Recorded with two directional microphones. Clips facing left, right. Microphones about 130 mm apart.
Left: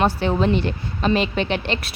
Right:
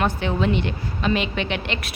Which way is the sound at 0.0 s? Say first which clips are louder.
Left 3 dB; 35° left (ahead or behind).